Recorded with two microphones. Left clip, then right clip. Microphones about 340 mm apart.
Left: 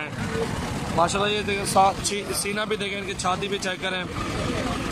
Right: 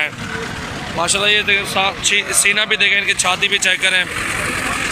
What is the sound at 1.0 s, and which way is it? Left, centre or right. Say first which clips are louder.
Speech: right 10 dB; centre.